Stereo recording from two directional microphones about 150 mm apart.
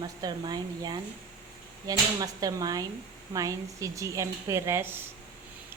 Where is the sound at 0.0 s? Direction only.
30° right (ahead or behind).